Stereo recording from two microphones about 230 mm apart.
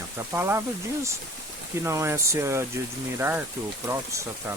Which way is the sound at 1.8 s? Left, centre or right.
Centre.